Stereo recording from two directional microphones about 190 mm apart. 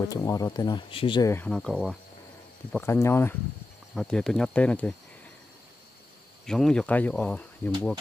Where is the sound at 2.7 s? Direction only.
15° left (ahead or behind).